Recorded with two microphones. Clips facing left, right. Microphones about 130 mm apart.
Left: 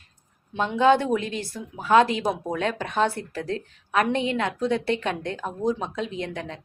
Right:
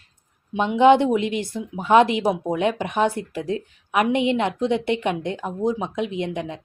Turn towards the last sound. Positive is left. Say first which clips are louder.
# right 5 dB
turn(degrees=-15)  # may be behind; listen again after turning